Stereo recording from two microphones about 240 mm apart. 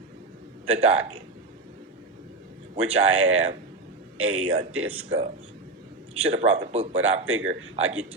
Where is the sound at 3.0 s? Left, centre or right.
Right.